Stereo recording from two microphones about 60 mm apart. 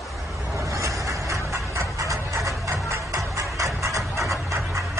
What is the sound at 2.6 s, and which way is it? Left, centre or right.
Music, right.